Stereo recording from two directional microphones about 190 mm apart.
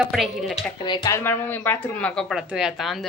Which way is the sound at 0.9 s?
20° left (ahead or behind).